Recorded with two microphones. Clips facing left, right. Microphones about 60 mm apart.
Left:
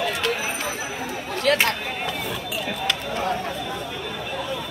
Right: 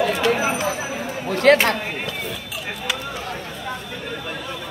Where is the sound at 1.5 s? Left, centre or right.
Right.